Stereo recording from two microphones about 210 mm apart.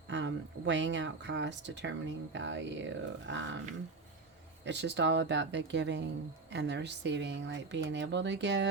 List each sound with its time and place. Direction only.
0.1 s speech: 60° right (ahead or behind)
4.6 s speech: 55° right (ahead or behind)